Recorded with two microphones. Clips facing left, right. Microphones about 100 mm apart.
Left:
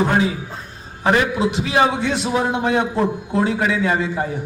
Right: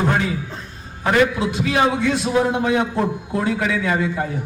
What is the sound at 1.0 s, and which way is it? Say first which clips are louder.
A man's voice: even; 20° left (ahead or behind).